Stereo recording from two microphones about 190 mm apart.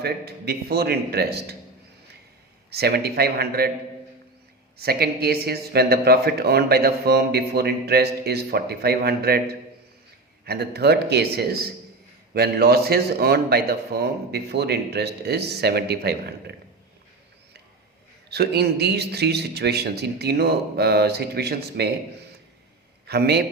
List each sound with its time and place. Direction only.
0.0 s speech: 55° right (ahead or behind)
2.6 s speech: 55° right (ahead or behind)
4.8 s speech: 55° right (ahead or behind)
18.3 s speech: 60° right (ahead or behind)
23.0 s speech: 60° right (ahead or behind)